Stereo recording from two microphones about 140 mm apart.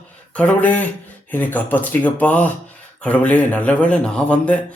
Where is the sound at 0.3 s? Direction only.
10° left (ahead or behind).